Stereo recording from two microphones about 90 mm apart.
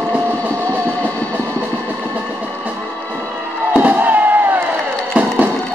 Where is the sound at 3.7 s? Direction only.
20° right (ahead or behind).